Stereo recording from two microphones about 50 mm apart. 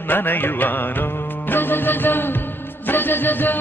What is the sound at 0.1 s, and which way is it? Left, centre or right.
Music, left.